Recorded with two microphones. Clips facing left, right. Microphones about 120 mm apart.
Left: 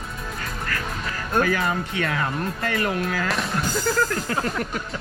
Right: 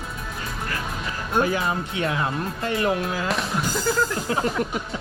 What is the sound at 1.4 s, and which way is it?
Speech, 20° right (ahead or behind).